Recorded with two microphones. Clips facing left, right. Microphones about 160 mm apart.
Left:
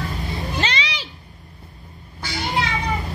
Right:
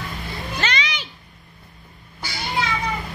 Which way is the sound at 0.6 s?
30° left (ahead or behind).